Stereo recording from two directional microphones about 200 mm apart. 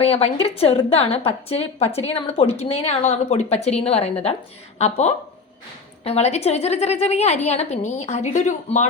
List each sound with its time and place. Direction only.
0.0 s a woman's voice: 30° left (ahead or behind)